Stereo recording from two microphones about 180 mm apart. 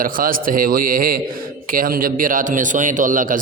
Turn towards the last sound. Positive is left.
turn(degrees=-45)  # may be behind; listen again after turning